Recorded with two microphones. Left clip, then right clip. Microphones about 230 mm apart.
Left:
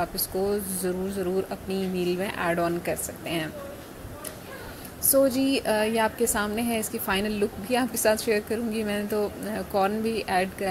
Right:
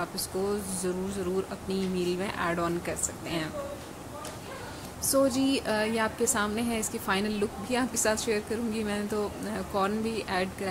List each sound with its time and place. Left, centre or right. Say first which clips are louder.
0.0 s a woman's voice: left 4 dB; centre
5.1 s a woman's voice: left 3 dB; centre